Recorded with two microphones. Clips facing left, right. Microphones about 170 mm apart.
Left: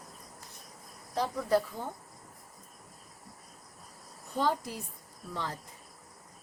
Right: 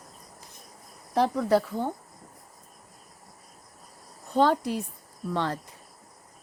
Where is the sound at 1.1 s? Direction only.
70° right (ahead or behind).